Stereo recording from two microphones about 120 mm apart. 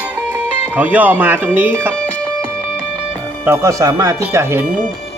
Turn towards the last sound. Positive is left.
turn(degrees=-20)  # may be behind; listen again after turning